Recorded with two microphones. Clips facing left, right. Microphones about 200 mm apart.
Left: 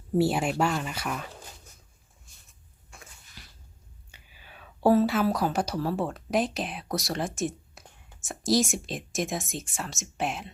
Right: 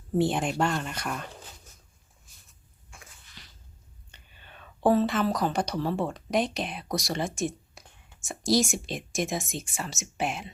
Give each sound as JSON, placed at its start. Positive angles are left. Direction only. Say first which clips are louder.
{"t": 0.1, "sound": "speech", "louder": "left 1 dB", "side_deg": 5}
{"t": 3.4, "sound": "a sound", "louder": "left 1 dB", "side_deg": 5}
{"t": 4.1, "sound": "speech", "louder": "even", "side_deg": 5}